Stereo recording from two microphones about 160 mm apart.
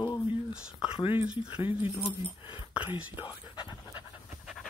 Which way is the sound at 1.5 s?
30° left (ahead or behind).